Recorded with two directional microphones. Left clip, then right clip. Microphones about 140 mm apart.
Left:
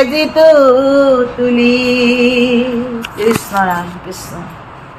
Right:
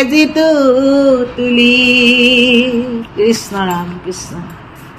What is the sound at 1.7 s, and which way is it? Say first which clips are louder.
Mantra: right 3 dB; 60° right (ahead or behind).